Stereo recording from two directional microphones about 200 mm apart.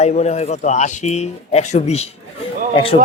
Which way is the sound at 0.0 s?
35° left (ahead or behind).